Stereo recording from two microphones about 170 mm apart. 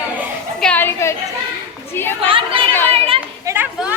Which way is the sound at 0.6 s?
10° left (ahead or behind).